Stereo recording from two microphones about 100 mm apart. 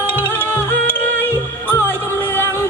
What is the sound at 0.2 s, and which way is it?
Music, 20° left (ahead or behind).